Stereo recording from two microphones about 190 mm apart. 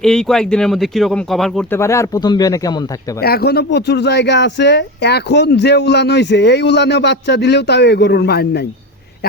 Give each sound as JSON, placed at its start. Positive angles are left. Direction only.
{"t": 0.0, "sound": "speech", "side_deg": 0}
{"t": 1.7, "sound": "speech", "side_deg": 15}
{"t": 3.2, "sound": "speech", "side_deg": 55}